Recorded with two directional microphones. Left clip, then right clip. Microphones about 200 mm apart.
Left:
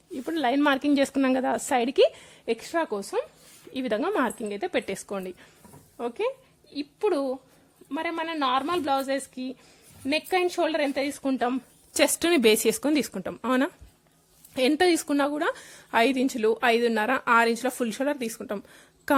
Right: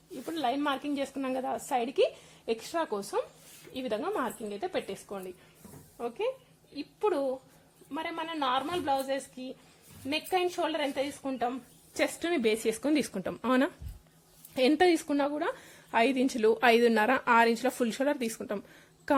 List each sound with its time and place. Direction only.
0.3 s a woman's voice: 45° left (ahead or behind)
12.6 s a woman's voice: 25° left (ahead or behind)